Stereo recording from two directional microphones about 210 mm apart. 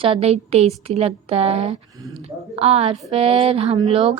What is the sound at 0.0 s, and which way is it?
A woman's voice, 30° right (ahead or behind).